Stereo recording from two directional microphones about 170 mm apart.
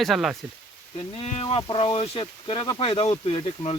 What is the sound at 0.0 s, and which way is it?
Speech, centre (ahead or behind).